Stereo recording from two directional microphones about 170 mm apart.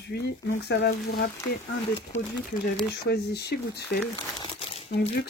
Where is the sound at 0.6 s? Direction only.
70° left (ahead or behind).